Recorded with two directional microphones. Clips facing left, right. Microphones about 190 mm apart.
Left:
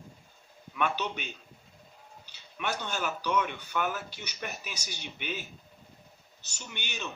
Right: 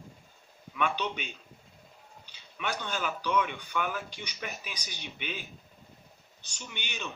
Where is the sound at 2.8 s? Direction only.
5° left (ahead or behind).